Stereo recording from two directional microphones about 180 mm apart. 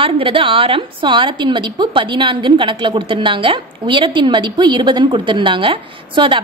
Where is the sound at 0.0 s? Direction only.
30° right (ahead or behind).